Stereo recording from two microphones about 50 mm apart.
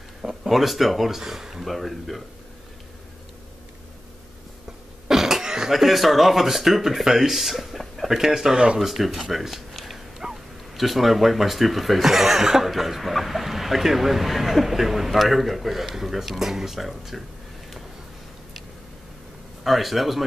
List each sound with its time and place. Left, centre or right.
0.2 s speech: centre
5.0 s speech: centre
8.7 s speech: centre
19.6 s speech: centre